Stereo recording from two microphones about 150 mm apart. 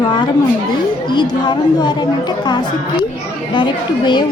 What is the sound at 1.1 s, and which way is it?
Speech, 30° left (ahead or behind).